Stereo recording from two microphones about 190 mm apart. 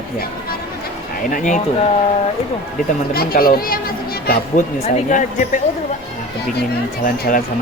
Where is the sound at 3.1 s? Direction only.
50° left (ahead or behind).